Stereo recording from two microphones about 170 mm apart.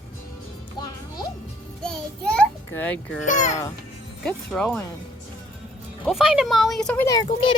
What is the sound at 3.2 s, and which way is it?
Speech, 45° left (ahead or behind).